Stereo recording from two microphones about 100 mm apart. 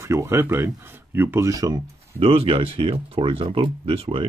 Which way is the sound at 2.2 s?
70° right (ahead or behind).